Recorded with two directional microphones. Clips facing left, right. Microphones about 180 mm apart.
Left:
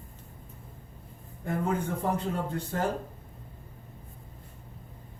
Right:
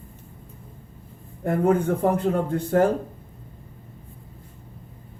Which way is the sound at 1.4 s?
55° right (ahead or behind).